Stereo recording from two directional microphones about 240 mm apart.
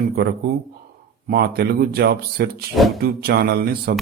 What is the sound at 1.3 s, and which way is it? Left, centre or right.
Speech, right.